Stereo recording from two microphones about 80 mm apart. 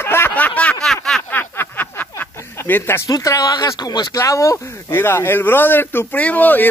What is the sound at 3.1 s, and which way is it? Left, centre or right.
Speech, left.